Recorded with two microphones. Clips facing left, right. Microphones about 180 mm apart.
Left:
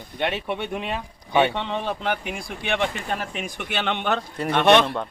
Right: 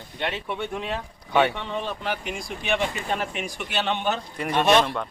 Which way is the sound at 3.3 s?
50° left (ahead or behind).